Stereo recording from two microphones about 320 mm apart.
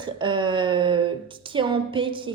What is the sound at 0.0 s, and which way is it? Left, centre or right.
A woman's voice, centre.